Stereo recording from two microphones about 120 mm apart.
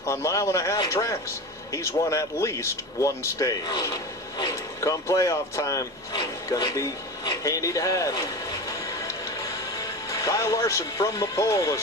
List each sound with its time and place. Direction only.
0.0 s speech: 25° left (ahead or behind)
10.1 s speech: 25° left (ahead or behind)